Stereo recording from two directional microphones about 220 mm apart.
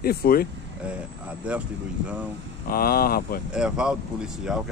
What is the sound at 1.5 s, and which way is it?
Speech, 5° right (ahead or behind).